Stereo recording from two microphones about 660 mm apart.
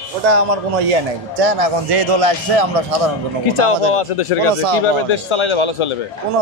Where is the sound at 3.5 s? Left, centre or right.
Left.